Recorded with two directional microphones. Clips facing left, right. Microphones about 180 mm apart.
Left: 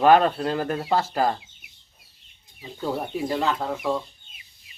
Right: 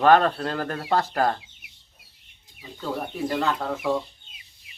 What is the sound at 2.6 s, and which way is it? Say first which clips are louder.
Speech: left 2 dB; 15° left (ahead or behind).